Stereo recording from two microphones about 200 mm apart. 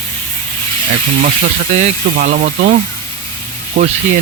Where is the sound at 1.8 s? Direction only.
40° right (ahead or behind).